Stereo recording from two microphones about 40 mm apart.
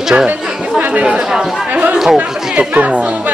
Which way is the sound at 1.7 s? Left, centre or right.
Right.